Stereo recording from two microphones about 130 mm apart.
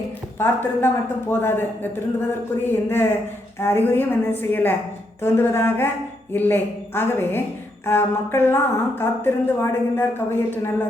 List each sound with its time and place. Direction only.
0.3 s a woman's voice: 20° left (ahead or behind)